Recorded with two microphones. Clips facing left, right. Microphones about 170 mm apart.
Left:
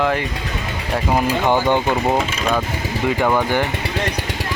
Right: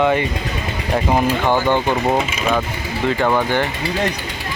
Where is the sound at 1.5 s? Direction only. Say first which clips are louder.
Left 1 dB; 15° left (ahead or behind).